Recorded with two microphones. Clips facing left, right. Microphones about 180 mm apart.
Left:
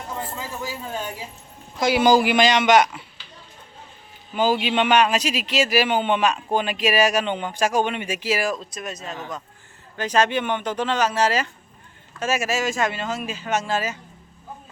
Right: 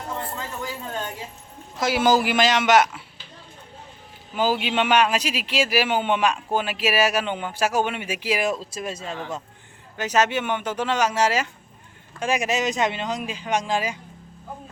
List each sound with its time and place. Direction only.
0.3 s a man's voice: 5° left (ahead or behind)
4.4 s speech: 5° right (ahead or behind); by 9.4 s 30° right (ahead or behind)
10.0 s speech: 10° right (ahead or behind)